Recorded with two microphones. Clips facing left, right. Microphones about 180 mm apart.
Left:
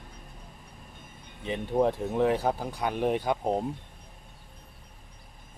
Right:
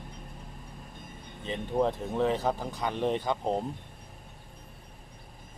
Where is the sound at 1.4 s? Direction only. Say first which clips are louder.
Left 2 dB; 15° left (ahead or behind).